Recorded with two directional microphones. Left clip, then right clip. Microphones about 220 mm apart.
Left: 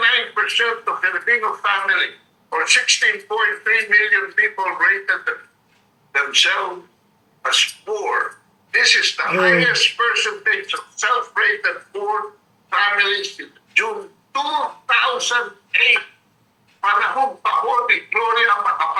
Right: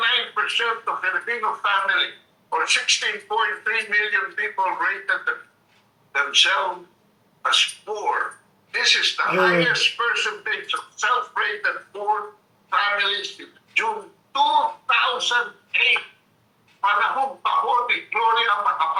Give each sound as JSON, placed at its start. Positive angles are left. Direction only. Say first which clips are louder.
{"t": 0.0, "sound": "speech", "louder": "left 4 dB", "side_deg": 25}